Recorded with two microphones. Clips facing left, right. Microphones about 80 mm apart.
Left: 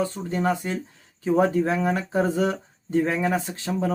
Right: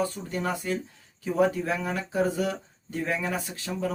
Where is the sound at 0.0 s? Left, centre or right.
Left.